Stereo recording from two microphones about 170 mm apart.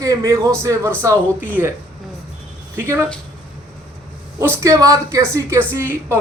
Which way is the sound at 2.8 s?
15° right (ahead or behind).